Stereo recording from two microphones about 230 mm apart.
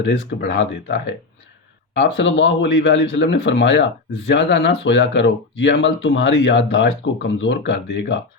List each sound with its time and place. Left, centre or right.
0.0 s speech: left